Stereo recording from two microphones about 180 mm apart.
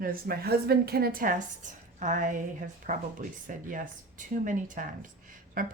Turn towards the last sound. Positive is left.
turn(degrees=-50)  # may be behind; listen again after turning